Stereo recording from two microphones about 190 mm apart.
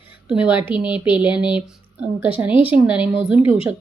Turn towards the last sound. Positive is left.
turn(degrees=-5)  # may be behind; listen again after turning